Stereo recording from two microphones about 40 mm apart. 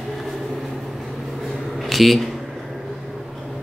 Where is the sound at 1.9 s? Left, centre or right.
Centre.